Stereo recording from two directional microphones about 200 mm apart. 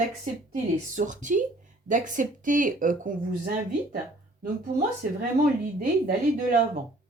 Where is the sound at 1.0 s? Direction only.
40° right (ahead or behind).